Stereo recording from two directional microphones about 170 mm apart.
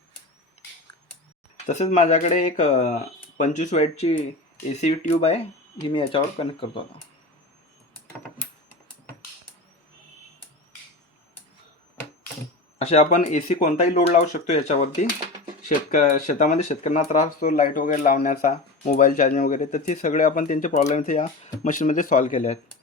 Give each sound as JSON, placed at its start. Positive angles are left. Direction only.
{"t": 1.6, "sound": "speech", "side_deg": 45}
{"t": 12.8, "sound": "speech", "side_deg": 40}
{"t": 15.9, "sound": "speech", "side_deg": 45}